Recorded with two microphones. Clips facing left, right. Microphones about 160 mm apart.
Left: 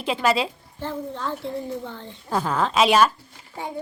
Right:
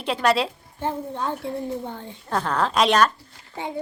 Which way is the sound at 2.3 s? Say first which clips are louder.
Even; 5° left (ahead or behind).